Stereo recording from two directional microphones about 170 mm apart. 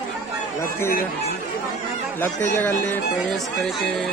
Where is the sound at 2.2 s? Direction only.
10° left (ahead or behind).